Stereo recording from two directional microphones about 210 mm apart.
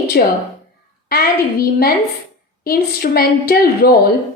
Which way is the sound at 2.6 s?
45° left (ahead or behind).